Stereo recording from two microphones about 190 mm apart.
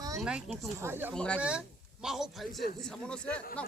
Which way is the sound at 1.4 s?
5° right (ahead or behind).